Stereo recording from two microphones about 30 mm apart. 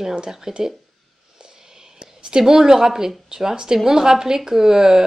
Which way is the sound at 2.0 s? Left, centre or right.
Right.